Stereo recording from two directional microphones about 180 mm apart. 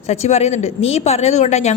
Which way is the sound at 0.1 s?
40° left (ahead or behind).